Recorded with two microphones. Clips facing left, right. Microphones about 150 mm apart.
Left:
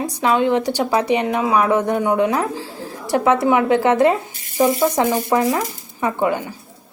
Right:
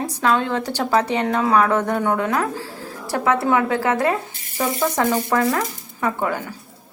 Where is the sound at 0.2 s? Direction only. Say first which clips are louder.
Left 4 dB; 15° left (ahead or behind).